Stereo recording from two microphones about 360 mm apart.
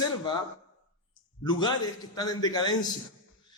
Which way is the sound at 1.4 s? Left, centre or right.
Centre.